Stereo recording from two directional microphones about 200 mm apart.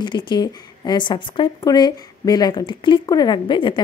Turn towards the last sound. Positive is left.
turn(degrees=25)  # may be behind; listen again after turning